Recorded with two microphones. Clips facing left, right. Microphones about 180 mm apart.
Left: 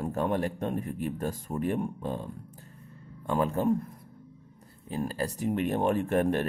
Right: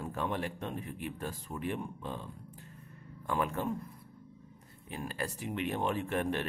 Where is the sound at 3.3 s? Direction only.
35° left (ahead or behind).